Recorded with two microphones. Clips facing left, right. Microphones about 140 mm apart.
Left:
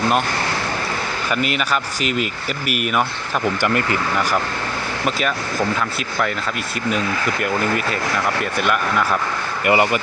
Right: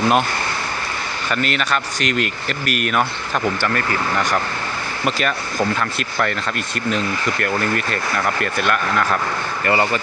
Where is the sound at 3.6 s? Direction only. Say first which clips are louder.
Left 2 dB; 20° left (ahead or behind).